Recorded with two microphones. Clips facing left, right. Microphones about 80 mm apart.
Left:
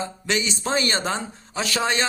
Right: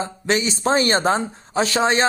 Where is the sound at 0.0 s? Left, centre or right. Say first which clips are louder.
Right 4 dB; right.